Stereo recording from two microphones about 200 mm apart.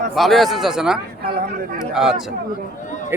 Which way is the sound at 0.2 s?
Centre (ahead or behind).